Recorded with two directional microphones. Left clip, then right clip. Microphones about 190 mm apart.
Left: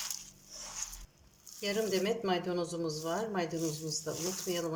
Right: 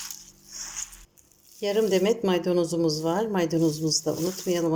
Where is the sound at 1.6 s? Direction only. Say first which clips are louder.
Right 9 dB; 40° right (ahead or behind).